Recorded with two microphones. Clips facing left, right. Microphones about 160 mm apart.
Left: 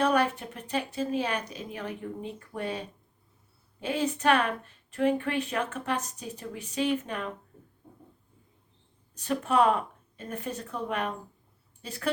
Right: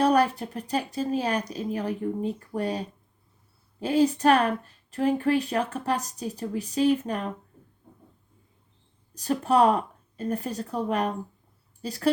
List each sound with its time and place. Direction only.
0.0 s speech: 35° right (ahead or behind)
9.1 s speech: 35° right (ahead or behind)